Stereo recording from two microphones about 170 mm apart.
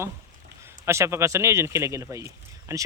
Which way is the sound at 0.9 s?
15° right (ahead or behind).